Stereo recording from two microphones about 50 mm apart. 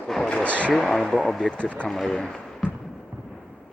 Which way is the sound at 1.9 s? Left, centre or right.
Centre.